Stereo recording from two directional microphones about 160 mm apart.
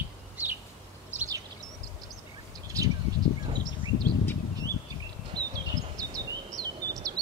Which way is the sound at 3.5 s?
25° right (ahead or behind).